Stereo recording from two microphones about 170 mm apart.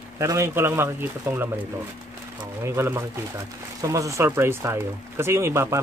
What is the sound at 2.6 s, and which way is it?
Speech, 15° right (ahead or behind).